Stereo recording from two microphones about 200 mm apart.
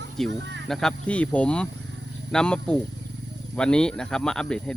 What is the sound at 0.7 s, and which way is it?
Speech, 5° left (ahead or behind).